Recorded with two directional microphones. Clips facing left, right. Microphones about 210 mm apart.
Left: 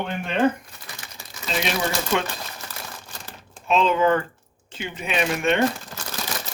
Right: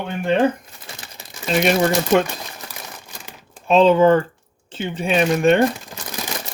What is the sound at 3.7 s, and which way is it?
Speech, 35° right (ahead or behind).